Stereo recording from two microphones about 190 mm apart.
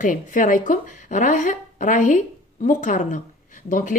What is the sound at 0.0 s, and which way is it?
A woman's voice, 45° left (ahead or behind).